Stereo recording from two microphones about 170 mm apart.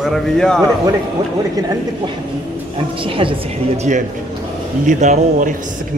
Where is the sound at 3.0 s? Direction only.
30° right (ahead or behind).